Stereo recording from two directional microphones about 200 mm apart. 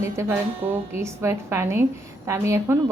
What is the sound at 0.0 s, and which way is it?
A woman's voice, 15° right (ahead or behind).